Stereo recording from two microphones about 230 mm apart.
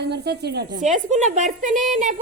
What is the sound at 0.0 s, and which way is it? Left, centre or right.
A woman's voice, right.